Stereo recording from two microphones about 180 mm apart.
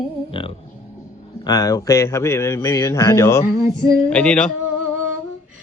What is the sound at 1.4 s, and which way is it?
A man's voice, 20° left (ahead or behind).